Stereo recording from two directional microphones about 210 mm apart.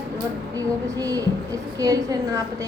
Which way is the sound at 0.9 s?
15° right (ahead or behind).